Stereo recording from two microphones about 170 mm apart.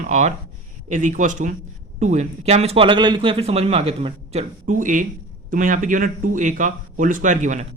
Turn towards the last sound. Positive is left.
turn(degrees=-45)  # may be behind; listen again after turning